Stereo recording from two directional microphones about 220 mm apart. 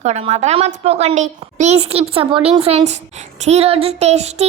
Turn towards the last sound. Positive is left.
turn(degrees=-30)  # may be behind; listen again after turning